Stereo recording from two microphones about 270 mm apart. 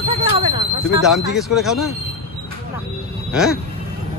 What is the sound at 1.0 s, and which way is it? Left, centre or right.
Speech, centre.